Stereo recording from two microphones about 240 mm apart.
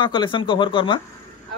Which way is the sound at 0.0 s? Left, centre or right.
Centre.